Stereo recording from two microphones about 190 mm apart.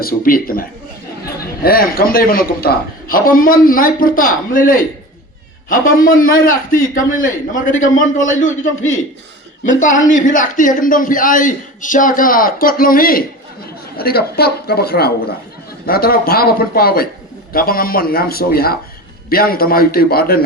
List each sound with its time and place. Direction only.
0.0 s a man's voice: 50° left (ahead or behind)